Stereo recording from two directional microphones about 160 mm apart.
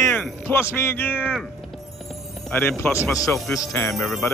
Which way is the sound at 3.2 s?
20° left (ahead or behind).